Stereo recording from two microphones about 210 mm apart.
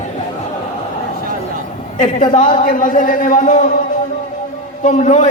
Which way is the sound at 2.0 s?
35° left (ahead or behind).